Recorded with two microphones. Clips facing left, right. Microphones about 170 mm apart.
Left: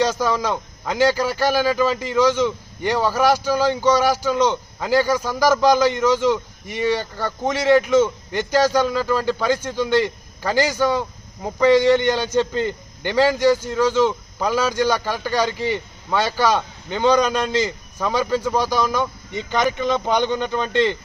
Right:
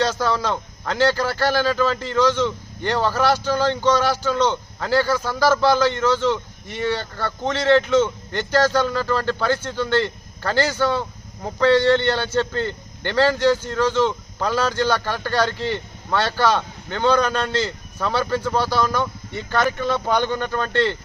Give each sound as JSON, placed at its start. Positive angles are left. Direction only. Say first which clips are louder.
{"t": 0.0, "sound": "a man's voice", "louder": "left 1 dB", "side_deg": 10}